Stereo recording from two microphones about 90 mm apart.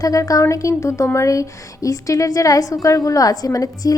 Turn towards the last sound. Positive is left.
turn(degrees=45)  # may be behind; listen again after turning